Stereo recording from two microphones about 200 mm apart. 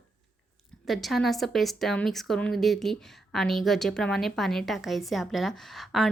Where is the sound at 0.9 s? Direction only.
Centre (ahead or behind).